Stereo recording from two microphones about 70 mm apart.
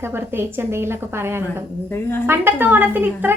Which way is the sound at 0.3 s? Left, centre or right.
Right.